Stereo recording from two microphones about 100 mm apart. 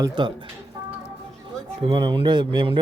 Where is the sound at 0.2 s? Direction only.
50° right (ahead or behind).